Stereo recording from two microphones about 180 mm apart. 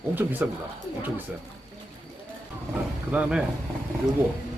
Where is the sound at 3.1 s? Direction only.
5° right (ahead or behind).